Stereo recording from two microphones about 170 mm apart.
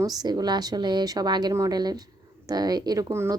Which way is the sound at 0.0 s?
25° right (ahead or behind).